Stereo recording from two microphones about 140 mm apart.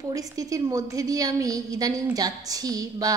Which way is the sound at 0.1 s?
25° right (ahead or behind).